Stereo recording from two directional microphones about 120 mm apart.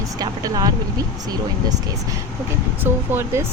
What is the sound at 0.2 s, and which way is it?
Speech, 30° right (ahead or behind).